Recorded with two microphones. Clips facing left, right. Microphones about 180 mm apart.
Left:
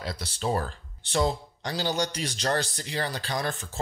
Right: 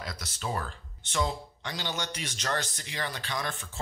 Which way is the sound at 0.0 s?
30° left (ahead or behind).